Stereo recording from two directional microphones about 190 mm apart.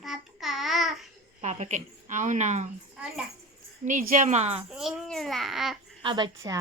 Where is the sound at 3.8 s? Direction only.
45° right (ahead or behind).